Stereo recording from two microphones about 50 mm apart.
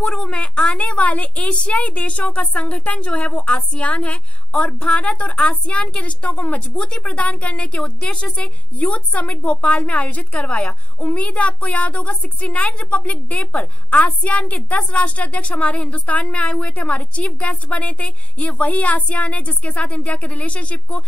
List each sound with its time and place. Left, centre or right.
0.1 s a woman's voice: left